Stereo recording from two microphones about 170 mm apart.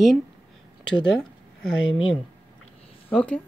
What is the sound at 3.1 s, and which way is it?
Speech, 10° left (ahead or behind).